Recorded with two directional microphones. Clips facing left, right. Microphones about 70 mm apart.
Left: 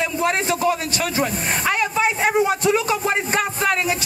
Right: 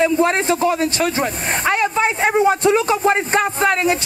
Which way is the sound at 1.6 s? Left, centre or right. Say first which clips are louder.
Right 4 dB; centre.